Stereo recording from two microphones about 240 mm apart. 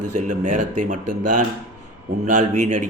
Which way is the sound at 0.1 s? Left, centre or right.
Right.